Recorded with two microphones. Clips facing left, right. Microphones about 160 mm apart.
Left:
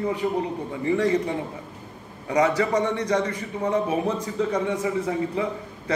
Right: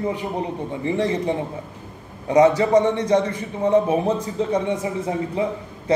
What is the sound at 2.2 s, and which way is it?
A man's voice, 25° right (ahead or behind).